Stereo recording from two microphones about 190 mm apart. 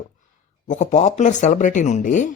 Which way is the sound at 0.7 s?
40° left (ahead or behind).